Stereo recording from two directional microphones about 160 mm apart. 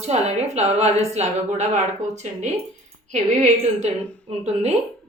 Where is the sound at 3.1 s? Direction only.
45° right (ahead or behind).